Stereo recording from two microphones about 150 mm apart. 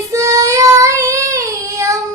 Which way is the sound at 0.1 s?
20° right (ahead or behind).